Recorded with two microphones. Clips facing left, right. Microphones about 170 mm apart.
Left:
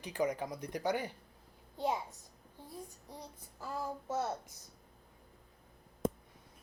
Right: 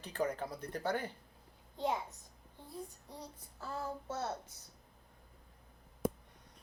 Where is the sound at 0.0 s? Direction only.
15° left (ahead or behind).